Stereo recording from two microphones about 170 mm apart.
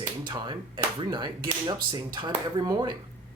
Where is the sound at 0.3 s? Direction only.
25° right (ahead or behind).